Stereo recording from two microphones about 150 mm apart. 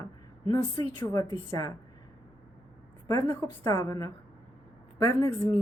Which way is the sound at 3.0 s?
20° left (ahead or behind).